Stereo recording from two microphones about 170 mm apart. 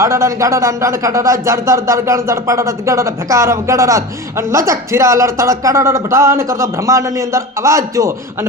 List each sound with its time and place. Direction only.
0.0 s speech: 15° right (ahead or behind)